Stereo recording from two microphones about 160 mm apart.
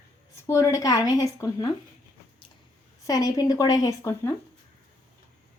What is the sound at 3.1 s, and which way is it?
Speech, 20° left (ahead or behind).